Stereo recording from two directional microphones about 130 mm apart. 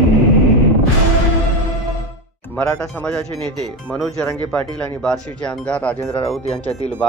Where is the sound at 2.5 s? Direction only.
5° left (ahead or behind).